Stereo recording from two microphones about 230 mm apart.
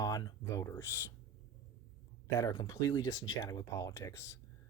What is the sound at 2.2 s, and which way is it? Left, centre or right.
Speech, centre.